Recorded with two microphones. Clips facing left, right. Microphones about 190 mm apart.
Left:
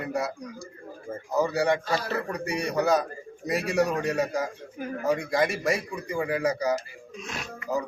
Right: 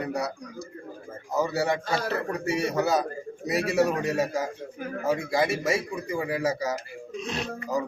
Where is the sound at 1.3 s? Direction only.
Centre (ahead or behind).